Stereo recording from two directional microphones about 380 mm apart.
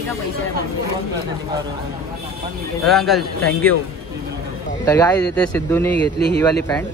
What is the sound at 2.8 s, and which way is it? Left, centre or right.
Speech, centre.